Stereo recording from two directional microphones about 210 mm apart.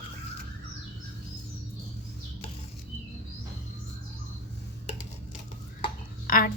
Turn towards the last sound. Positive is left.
turn(degrees=40)  # may be behind; listen again after turning